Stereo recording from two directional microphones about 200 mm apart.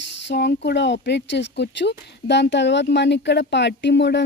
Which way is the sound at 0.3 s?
60° left (ahead or behind).